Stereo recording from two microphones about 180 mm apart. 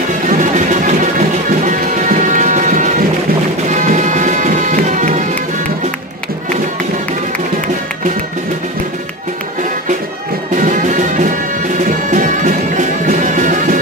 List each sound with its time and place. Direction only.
0.3 s music: 45° right (ahead or behind)
10.5 s music: 45° right (ahead or behind)